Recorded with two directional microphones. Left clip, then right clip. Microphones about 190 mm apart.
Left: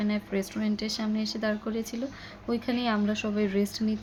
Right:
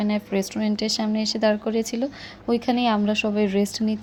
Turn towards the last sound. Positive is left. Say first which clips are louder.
# right 5 dB
turn(degrees=-30)  # may be behind; listen again after turning